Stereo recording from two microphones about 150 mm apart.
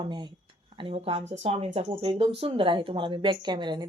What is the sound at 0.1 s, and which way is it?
Speech, 30° right (ahead or behind).